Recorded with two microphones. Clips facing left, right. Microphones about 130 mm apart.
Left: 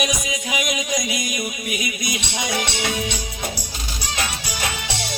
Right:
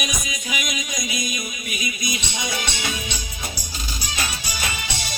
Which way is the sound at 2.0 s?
65° left (ahead or behind).